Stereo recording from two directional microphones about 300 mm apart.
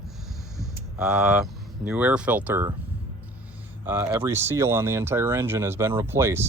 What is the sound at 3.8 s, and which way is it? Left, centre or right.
Speech, centre.